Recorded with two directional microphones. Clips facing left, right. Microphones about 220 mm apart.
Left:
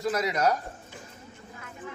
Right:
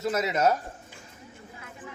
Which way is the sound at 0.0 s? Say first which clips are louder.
Right 1 dB; 25° right (ahead or behind).